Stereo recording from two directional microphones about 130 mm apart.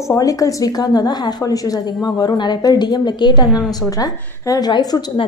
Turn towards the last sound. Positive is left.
turn(degrees=35)  # may be behind; listen again after turning